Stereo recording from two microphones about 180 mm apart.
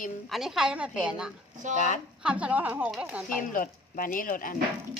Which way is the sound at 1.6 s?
45° right (ahead or behind).